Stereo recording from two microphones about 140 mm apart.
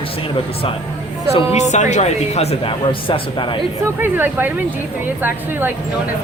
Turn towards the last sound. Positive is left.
turn(degrees=-15)  # may be behind; listen again after turning